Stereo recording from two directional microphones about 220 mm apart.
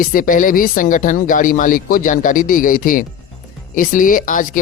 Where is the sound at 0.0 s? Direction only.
40° left (ahead or behind).